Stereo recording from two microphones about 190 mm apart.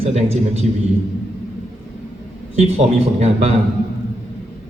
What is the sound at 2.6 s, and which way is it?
Speech, 35° right (ahead or behind).